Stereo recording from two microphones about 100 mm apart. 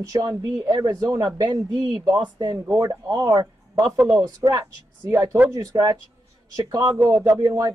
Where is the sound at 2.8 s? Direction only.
35° right (ahead or behind).